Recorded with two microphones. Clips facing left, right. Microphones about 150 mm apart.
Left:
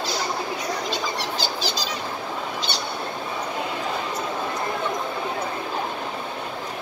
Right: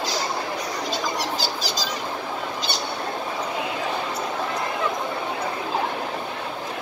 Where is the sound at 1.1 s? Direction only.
40° right (ahead or behind).